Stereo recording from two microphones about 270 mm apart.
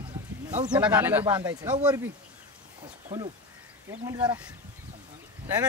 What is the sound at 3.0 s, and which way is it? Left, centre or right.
Speech, right.